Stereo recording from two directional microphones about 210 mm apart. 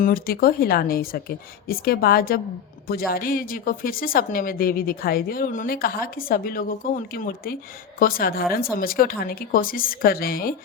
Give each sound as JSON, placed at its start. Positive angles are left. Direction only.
{"t": 0.0, "sound": "a woman's voice", "side_deg": 45}